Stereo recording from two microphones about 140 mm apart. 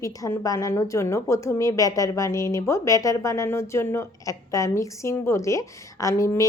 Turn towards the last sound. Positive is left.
turn(degrees=20)  # may be behind; listen again after turning